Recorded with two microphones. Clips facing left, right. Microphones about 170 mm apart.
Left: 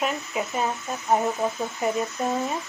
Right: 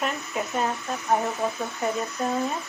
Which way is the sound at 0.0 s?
5° left (ahead or behind).